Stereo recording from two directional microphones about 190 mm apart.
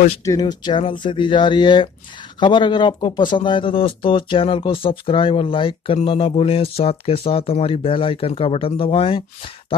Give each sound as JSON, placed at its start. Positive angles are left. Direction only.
{"t": 0.2, "sound": "speech", "side_deg": 20}